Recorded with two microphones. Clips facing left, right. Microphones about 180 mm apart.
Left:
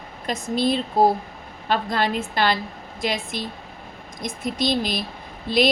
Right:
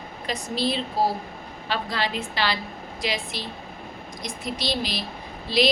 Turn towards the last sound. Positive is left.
turn(degrees=50)  # may be behind; listen again after turning